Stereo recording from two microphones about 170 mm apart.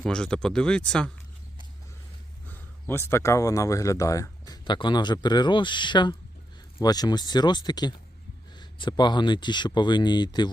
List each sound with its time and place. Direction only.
0.0 s speech: 5° left (ahead or behind)
2.5 s speech: 15° left (ahead or behind)